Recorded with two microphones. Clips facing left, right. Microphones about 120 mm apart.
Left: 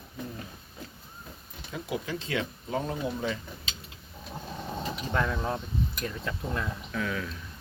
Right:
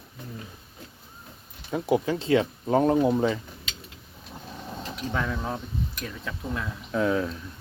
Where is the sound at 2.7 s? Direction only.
50° right (ahead or behind).